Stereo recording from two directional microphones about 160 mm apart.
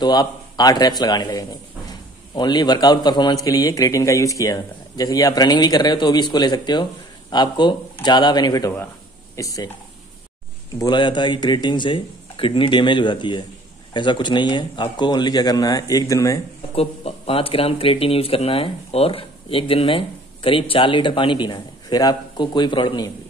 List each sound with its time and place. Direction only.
0.0 s a man's voice: 25° left (ahead or behind)
10.8 s a man's voice: 30° left (ahead or behind)
16.7 s speech: 40° left (ahead or behind)